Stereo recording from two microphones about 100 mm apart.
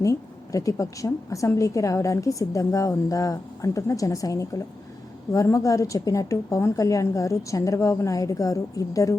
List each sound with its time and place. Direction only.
0.0 s a woman's voice: 35° left (ahead or behind)